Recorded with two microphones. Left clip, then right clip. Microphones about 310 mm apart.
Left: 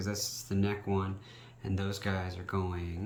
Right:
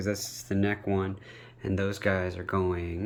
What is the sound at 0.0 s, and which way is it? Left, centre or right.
Speech, centre.